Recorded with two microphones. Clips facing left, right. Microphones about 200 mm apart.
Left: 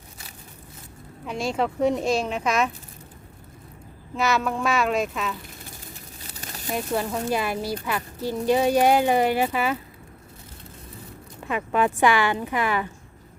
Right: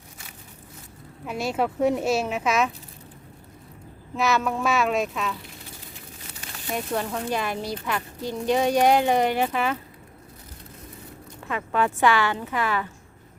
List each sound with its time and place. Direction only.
1.2 s speech: 5° right (ahead or behind)
4.2 s speech: centre (ahead or behind)
6.7 s speech: 5° left (ahead or behind)
11.4 s a woman's voice: 15° left (ahead or behind)